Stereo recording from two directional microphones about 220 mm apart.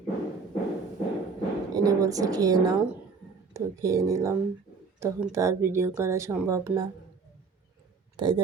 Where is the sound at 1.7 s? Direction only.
15° right (ahead or behind).